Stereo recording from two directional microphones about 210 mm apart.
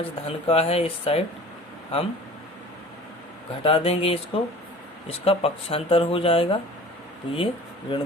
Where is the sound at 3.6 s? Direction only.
25° left (ahead or behind).